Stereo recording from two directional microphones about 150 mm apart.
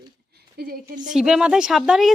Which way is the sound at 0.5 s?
80° right.